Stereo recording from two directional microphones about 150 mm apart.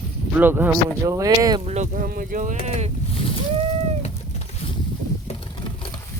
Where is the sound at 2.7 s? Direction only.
50° right (ahead or behind).